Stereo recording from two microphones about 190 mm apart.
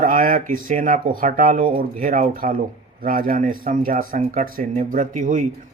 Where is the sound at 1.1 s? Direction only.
45° right (ahead or behind).